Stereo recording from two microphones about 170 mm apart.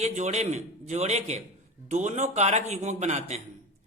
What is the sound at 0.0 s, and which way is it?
A man's voice, 40° right (ahead or behind).